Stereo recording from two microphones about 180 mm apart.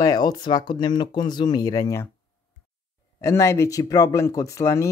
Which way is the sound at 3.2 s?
15° left (ahead or behind).